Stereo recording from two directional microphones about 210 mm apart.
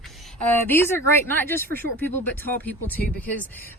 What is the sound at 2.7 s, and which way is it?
Speech, 10° left (ahead or behind).